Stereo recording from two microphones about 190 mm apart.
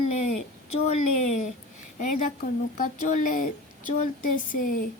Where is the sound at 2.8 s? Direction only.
40° left (ahead or behind).